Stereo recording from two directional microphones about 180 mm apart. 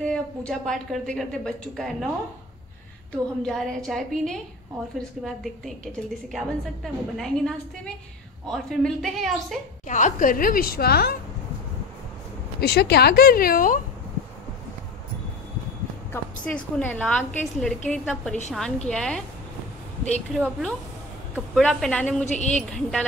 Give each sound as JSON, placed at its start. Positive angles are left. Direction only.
{"t": 0.0, "sound": "a woman's voice", "side_deg": 5}
{"t": 3.4, "sound": "a woman's voice", "side_deg": 0}
{"t": 9.8, "sound": "a woman's voice", "side_deg": 40}
{"t": 12.5, "sound": "speech", "side_deg": 65}
{"t": 16.1, "sound": "a woman's voice", "side_deg": 10}
{"t": 20.3, "sound": "a woman's voice", "side_deg": 5}
{"t": 22.2, "sound": "a woman's voice", "side_deg": 40}
{"t": 22.6, "sound": "a woman's voice", "side_deg": 5}